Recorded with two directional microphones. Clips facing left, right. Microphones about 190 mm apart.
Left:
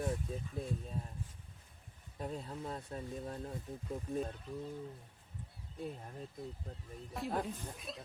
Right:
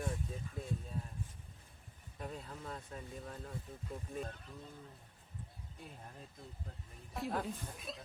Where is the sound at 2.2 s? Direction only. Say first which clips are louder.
Left 4 dB; 30° left (ahead or behind).